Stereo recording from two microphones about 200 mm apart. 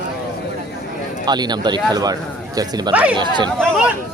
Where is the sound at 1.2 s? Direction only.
20° right (ahead or behind).